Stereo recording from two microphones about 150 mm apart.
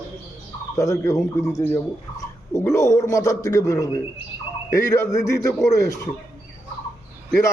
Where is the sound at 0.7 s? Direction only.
20° left (ahead or behind).